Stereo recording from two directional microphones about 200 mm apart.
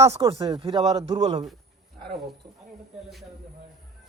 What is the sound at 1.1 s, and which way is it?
Speech, 35° right (ahead or behind).